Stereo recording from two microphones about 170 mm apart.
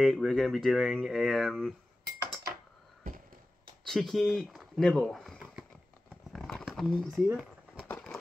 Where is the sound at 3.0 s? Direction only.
50° right (ahead or behind).